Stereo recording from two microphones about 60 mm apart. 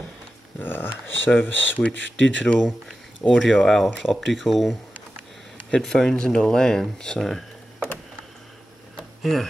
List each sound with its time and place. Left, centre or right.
0.6 s speech: left
1.8 s speech: centre
3.3 s speech: centre
5.8 s speech: centre
9.2 s speech: centre